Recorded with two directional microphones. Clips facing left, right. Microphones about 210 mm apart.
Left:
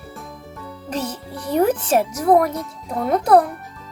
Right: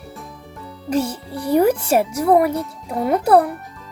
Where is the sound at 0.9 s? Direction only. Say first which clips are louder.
Right 6 dB; 10° right (ahead or behind).